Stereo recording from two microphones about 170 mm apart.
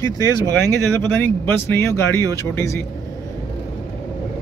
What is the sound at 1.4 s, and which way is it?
Speech, 15° left (ahead or behind).